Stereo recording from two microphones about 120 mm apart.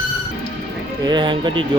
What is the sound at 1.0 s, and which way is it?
Speech, 40° right (ahead or behind).